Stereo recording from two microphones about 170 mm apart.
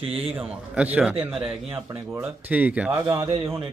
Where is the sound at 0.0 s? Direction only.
35° right (ahead or behind).